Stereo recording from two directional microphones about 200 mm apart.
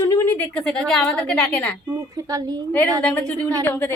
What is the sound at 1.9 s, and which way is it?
Speech, 15° right (ahead or behind).